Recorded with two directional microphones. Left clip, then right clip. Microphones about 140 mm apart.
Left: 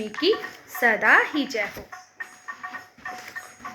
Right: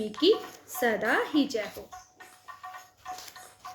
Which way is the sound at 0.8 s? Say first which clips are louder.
Left 8 dB; 30° right (ahead or behind).